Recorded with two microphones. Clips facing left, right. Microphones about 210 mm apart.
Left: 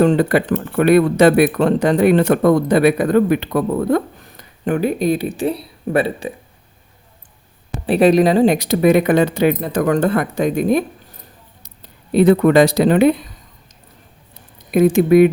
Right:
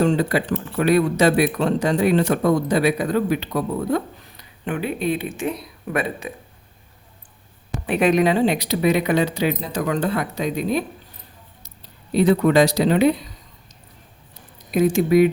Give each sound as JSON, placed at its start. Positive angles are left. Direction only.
{"t": 0.0, "sound": "speech", "side_deg": 60}
{"t": 7.9, "sound": "speech", "side_deg": 35}
{"t": 12.1, "sound": "speech", "side_deg": 55}
{"t": 14.7, "sound": "speech", "side_deg": 55}